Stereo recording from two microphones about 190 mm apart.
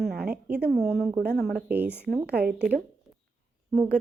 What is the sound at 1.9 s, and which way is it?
Speech, 60° right (ahead or behind).